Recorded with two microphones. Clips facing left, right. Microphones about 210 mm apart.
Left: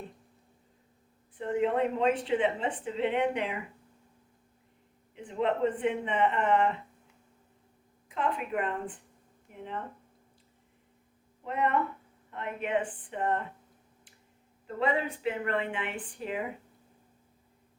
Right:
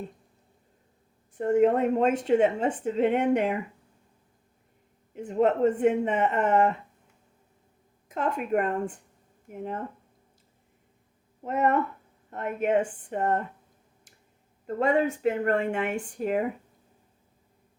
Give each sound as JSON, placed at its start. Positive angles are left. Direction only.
{"t": 1.4, "sound": "a woman's voice", "side_deg": -45}
{"t": 5.1, "sound": "a woman's voice", "side_deg": -45}
{"t": 8.0, "sound": "a woman's voice", "side_deg": -45}
{"t": 11.4, "sound": "a woman's voice", "side_deg": -45}
{"t": 14.8, "sound": "a woman's voice", "side_deg": -45}